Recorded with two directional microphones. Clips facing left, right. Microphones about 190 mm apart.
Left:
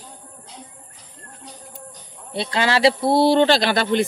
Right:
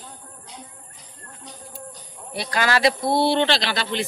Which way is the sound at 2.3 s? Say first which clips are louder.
Left 2 dB; 25° left (ahead or behind).